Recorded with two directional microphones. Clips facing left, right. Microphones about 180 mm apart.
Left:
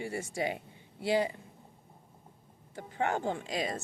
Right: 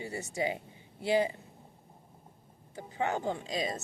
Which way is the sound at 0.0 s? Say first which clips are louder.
Even; 20° right (ahead or behind).